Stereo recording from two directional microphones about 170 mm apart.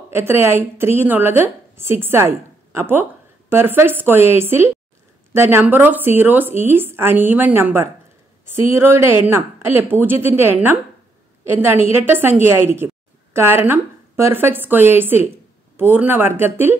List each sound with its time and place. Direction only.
0.1 s a woman's voice: 15° right (ahead or behind)